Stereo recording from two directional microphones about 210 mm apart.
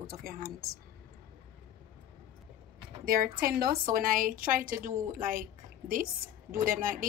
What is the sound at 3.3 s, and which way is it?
A woman's voice, 45° right (ahead or behind).